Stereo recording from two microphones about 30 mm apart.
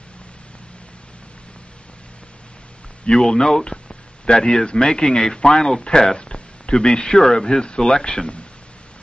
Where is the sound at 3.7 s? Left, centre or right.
Left.